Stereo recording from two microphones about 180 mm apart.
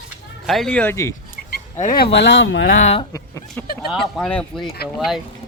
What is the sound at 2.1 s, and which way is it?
Speech, 85° left.